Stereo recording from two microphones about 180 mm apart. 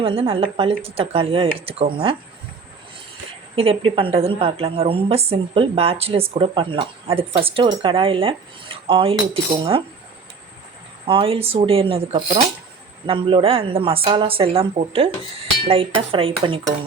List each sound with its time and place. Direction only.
0.0 s a woman's voice: 30° right (ahead or behind)
3.5 s a woman's voice: 30° right (ahead or behind)
11.0 s a woman's voice: 30° right (ahead or behind)
15.6 s dishes: 30° right (ahead or behind)